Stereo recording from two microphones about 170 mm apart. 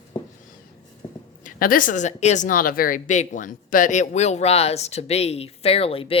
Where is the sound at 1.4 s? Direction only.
55° left (ahead or behind); by 6.1 s 35° left (ahead or behind).